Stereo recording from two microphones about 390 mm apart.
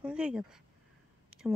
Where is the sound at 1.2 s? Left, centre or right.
Centre.